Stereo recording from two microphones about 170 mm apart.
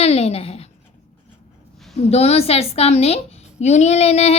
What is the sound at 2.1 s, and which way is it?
A child's voice, 40° left (ahead or behind).